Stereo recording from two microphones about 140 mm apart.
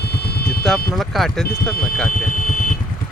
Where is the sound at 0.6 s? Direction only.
5° left (ahead or behind).